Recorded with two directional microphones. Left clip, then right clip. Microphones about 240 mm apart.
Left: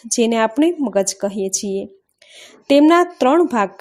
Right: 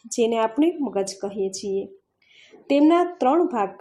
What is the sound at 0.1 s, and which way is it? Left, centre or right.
Speech, left.